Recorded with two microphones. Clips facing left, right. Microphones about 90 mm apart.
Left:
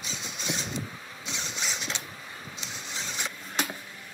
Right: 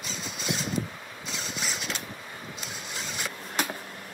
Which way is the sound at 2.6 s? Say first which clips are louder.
Even; 5° right (ahead or behind).